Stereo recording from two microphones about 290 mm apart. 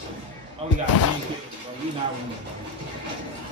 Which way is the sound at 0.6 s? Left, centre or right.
Right.